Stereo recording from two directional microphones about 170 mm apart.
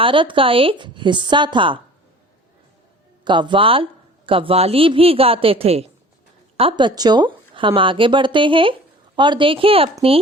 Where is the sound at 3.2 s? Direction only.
25° right (ahead or behind).